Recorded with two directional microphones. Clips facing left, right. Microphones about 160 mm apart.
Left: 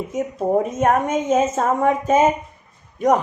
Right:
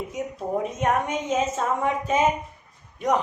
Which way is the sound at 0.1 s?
45° left (ahead or behind).